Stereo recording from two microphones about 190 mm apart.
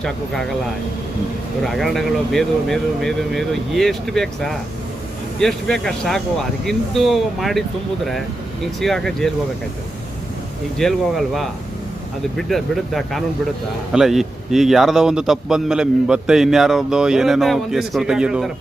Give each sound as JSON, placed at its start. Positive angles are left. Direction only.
{"t": 1.6, "sound": "a man's voice", "side_deg": 0}
{"t": 8.6, "sound": "a man's voice", "side_deg": 0}
{"t": 10.8, "sound": "a man's voice", "side_deg": 0}
{"t": 12.4, "sound": "a man's voice", "side_deg": 0}